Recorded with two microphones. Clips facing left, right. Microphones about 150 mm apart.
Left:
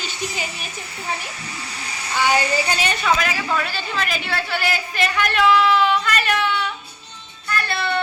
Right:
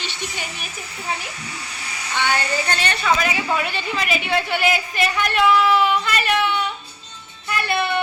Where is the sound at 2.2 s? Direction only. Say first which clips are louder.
Left 3 dB; 10° left (ahead or behind).